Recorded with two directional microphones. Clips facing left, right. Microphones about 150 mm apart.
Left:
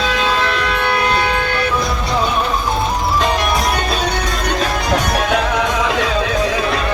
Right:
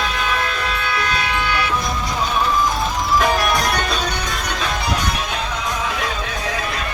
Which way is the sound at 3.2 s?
25° left (ahead or behind).